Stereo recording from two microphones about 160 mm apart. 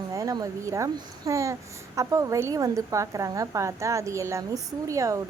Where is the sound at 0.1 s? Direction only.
20° right (ahead or behind).